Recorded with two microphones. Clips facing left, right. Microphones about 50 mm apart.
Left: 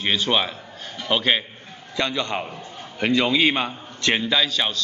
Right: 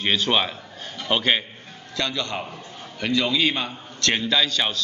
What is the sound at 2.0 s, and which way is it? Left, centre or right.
A man's voice, left.